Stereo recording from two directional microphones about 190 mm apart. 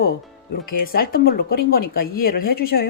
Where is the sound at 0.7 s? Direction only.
50° left (ahead or behind).